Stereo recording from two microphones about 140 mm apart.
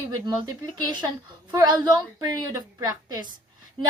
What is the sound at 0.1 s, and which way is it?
A woman's voice, 30° right (ahead or behind).